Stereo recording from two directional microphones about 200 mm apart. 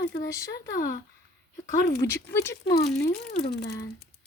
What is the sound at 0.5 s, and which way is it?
Speech, 55° left (ahead or behind).